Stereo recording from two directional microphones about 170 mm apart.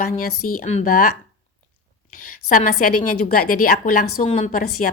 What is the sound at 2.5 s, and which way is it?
A woman's voice, 50° left (ahead or behind).